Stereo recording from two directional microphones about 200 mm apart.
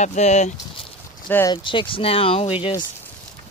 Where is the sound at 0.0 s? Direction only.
35° left (ahead or behind).